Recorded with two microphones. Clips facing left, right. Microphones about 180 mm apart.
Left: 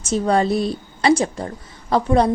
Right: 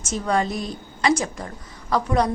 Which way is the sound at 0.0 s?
35° left (ahead or behind).